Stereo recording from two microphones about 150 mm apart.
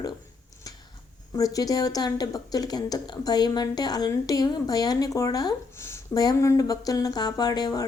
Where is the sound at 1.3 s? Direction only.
25° left (ahead or behind).